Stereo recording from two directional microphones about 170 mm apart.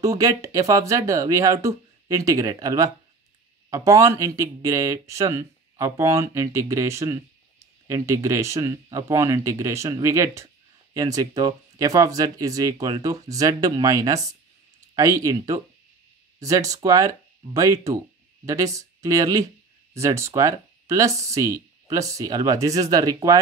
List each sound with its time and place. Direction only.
0.0 s speech: 20° right (ahead or behind)